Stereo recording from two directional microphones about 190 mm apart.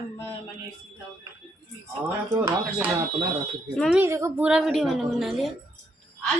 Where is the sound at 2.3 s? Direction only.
15° right (ahead or behind).